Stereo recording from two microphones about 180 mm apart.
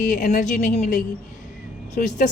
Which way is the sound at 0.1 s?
45° left (ahead or behind).